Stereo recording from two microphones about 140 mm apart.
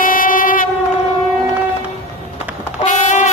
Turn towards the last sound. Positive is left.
turn(degrees=60)  # may be behind; listen again after turning